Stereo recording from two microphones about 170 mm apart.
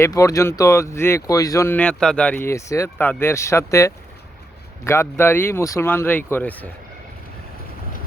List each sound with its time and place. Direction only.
0.0 s speech: 20° left (ahead or behind)